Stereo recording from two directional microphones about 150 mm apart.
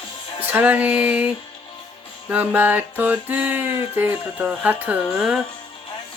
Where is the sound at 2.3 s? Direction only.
10° right (ahead or behind).